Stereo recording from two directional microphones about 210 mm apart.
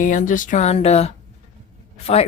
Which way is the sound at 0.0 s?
40° left (ahead or behind).